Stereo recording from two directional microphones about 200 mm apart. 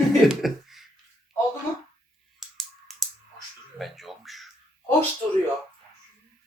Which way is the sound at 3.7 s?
Centre (ahead or behind).